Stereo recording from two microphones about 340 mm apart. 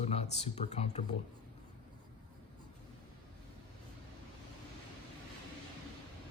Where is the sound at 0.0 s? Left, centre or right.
Centre.